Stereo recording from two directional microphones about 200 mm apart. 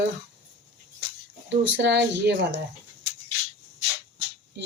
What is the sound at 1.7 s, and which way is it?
Speech, 60° right (ahead or behind).